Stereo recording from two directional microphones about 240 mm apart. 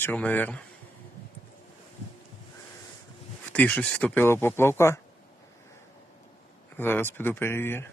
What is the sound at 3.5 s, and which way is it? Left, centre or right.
Speech, centre.